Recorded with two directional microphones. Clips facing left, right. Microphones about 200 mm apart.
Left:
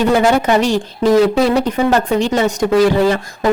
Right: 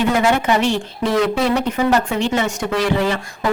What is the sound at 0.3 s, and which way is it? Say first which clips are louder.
Speech: left 4 dB; 40° left (ahead or behind).